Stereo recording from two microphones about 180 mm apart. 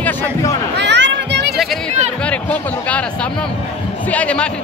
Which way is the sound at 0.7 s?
75° right (ahead or behind).